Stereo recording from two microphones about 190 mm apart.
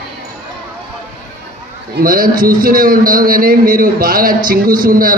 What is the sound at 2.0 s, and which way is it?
A man's voice, 50° right (ahead or behind).